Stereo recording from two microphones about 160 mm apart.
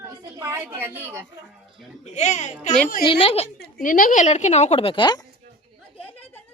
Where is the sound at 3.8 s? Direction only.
55° left (ahead or behind); by 5.2 s 30° left (ahead or behind).